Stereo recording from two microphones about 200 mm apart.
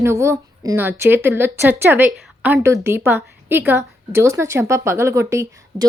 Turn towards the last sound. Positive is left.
turn(degrees=-15)  # may be behind; listen again after turning